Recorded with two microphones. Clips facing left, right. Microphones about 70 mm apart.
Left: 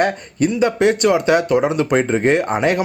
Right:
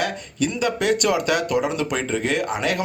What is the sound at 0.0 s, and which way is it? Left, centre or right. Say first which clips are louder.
Speech: left 6 dB; left.